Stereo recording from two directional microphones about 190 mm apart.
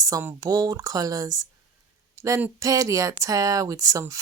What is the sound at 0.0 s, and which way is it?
Speech, 15° right (ahead or behind).